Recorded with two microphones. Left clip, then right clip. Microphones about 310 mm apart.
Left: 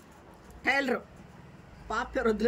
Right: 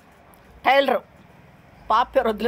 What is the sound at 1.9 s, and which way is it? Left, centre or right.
Speech, centre.